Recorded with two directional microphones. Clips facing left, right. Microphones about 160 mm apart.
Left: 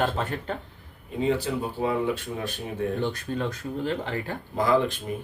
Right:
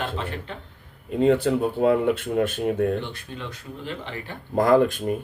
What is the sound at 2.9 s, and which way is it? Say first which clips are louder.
Speech: left 4 dB; 45° left (ahead or behind).